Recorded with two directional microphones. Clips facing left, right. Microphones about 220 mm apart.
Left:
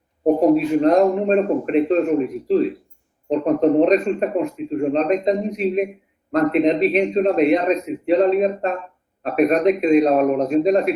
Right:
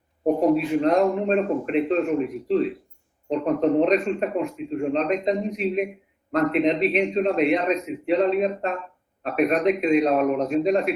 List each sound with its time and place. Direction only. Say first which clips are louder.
0.3 s a man's voice: left 4 dB; 40° left (ahead or behind)